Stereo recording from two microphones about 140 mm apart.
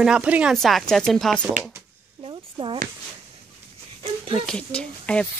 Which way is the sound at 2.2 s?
40° right (ahead or behind).